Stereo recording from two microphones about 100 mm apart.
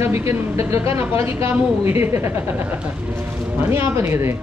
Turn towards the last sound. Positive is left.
turn(degrees=-25)  # may be behind; listen again after turning